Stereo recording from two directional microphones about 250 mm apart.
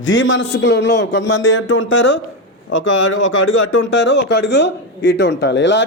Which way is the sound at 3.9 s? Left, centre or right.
Left.